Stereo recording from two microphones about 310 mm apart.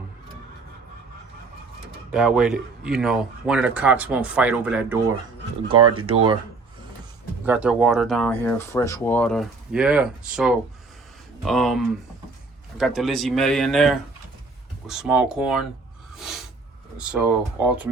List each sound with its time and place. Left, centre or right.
2.1 s speech: centre
5.8 s speech: right
6.1 s speech: centre
7.4 s speech: centre
16.1 s a sound: centre
17.0 s speech: centre